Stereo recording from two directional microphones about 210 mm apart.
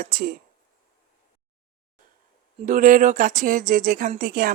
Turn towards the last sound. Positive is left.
turn(degrees=-45)  # may be behind; listen again after turning